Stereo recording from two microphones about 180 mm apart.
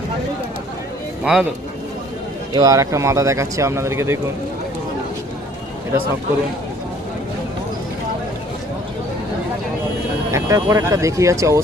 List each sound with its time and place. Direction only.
1.2 s speech: 5° right (ahead or behind)
2.5 s speech: 20° right (ahead or behind)
10.3 s speech: 20° right (ahead or behind)